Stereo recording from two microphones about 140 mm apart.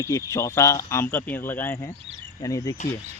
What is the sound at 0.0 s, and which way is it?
Speech, 20° left (ahead or behind).